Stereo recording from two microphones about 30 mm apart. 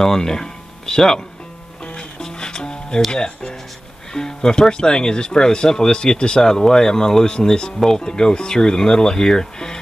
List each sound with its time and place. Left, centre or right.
0.0 s speech: centre
2.2 s music: left
3.1 s speech: left